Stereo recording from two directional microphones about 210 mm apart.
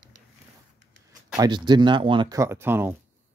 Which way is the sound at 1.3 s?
20° right (ahead or behind).